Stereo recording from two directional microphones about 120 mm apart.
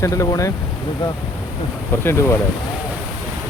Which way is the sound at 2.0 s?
20° left (ahead or behind).